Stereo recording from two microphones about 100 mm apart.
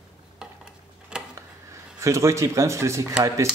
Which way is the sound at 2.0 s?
30° right (ahead or behind).